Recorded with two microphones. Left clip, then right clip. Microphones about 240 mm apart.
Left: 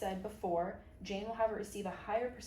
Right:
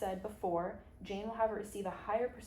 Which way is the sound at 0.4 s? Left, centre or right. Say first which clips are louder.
Left 1 dB; centre.